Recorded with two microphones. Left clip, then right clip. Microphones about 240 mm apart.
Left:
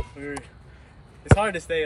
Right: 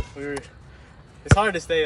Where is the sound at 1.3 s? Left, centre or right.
Centre.